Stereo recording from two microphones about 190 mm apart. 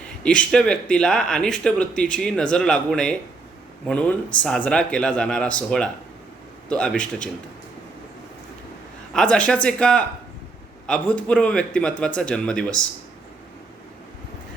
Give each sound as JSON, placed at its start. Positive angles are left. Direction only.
{"t": 0.2, "sound": "speech", "side_deg": 5}
{"t": 9.1, "sound": "speech", "side_deg": 5}